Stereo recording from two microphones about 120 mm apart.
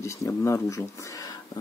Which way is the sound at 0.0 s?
25° left (ahead or behind).